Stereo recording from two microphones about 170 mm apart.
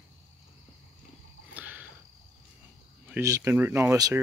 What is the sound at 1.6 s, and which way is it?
Wild animals, 10° right (ahead or behind).